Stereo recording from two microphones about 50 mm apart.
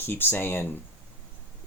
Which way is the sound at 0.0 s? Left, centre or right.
Left.